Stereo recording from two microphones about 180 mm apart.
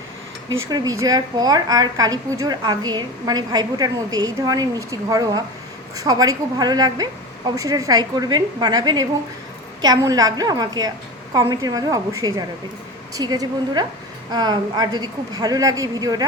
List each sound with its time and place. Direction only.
0.7 s a woman's voice: 20° right (ahead or behind)